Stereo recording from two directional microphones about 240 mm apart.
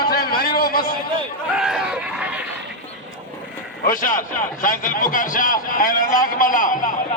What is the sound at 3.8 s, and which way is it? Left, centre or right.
A man's voice, left.